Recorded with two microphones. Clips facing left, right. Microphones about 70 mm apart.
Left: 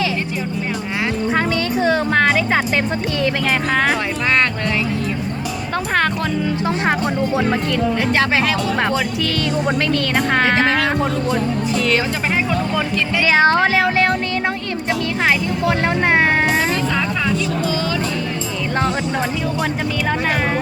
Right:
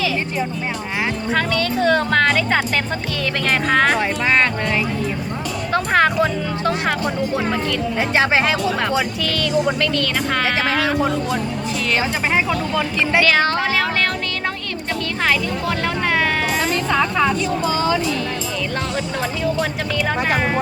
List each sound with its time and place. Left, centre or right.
1.3 s speech: centre
3.7 s speech: centre
5.7 s music: centre
6.7 s speech: left
7.9 s speech: centre
10.3 s speech: left
13.2 s speech: left
16.0 s speech: left
16.9 s vehicle: right